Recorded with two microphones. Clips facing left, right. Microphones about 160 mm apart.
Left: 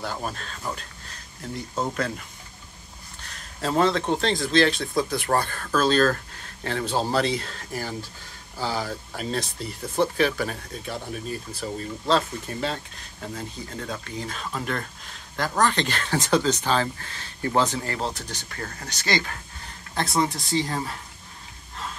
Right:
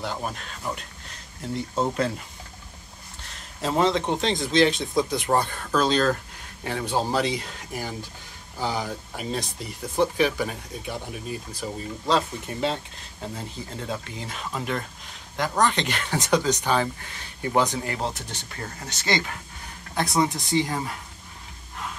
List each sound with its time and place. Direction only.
0.0 s speech: 15° right (ahead or behind)
1.8 s speech: 30° right (ahead or behind)
3.3 s speech: 20° right (ahead or behind)